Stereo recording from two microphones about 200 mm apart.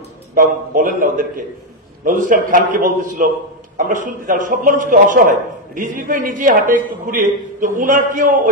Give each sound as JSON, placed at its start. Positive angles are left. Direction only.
{"t": 0.3, "sound": "a man's voice", "side_deg": -45}